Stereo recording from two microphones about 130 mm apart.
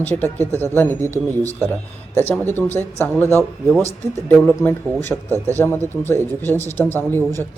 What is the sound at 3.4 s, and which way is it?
Speech, centre (ahead or behind).